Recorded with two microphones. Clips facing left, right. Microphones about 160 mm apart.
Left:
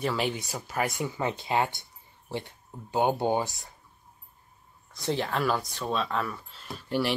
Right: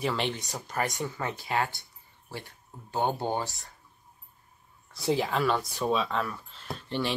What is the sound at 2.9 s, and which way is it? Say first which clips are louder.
Speech: left 4 dB; 15° left (ahead or behind).